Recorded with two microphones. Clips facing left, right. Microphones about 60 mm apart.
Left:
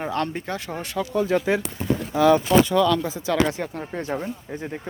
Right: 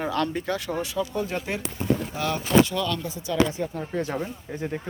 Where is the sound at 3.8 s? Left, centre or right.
Left.